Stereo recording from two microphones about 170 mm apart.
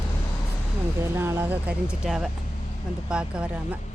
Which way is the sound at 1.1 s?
15° right (ahead or behind).